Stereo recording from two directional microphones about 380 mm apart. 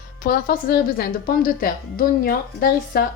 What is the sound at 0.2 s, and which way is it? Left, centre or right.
A woman's voice, left.